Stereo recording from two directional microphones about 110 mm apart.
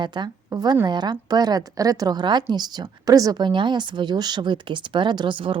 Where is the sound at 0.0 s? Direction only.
40° right (ahead or behind).